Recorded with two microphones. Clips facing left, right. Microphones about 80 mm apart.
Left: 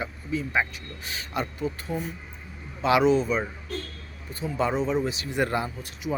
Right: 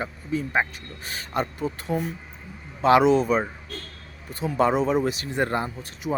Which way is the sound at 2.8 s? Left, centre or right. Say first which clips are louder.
Right 3 dB; right.